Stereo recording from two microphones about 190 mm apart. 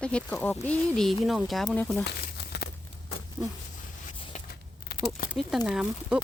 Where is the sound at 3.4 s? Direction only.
15° right (ahead or behind).